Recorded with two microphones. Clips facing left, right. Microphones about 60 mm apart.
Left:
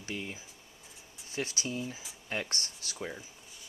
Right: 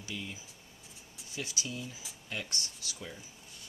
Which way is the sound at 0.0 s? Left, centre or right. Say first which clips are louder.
Left 3 dB; left.